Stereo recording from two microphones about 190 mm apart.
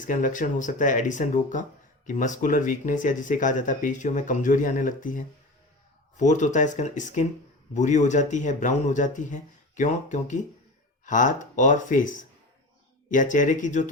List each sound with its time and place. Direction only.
0.0 s speech: 45° left (ahead or behind)